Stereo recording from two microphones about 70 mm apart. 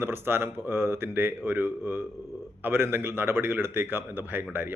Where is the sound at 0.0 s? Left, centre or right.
Right.